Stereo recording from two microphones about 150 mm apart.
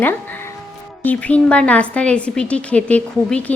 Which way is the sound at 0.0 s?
15° left (ahead or behind).